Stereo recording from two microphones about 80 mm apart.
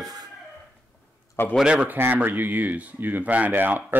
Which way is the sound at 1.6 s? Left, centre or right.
Centre.